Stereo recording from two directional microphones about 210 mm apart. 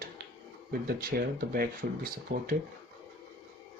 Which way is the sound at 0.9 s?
45° right (ahead or behind).